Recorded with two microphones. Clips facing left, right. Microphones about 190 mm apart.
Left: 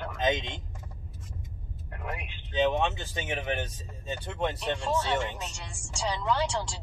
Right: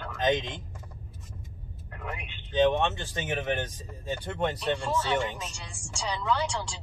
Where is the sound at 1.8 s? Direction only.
15° left (ahead or behind).